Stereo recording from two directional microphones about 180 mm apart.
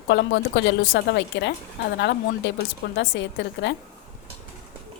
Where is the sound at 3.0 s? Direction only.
90° left.